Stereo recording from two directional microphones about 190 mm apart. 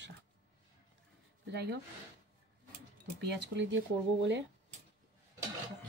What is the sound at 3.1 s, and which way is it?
Speech, 65° right (ahead or behind).